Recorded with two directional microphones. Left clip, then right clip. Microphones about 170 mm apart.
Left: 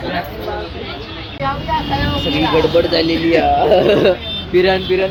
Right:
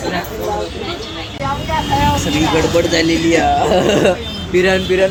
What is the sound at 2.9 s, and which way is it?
Speech, centre (ahead or behind).